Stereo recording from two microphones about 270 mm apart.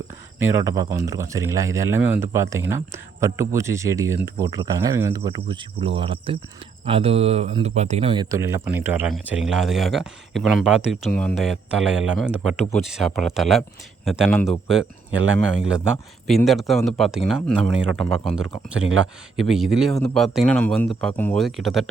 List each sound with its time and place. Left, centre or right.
0.3 s speech: centre
15.1 s speech: right
15.7 s speech: centre
19.5 s speech: centre